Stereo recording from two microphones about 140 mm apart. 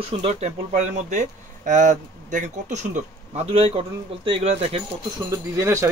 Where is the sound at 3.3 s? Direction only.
45° right (ahead or behind).